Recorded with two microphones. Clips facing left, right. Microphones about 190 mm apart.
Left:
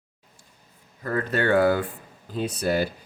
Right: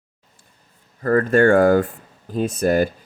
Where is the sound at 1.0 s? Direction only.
50° right (ahead or behind).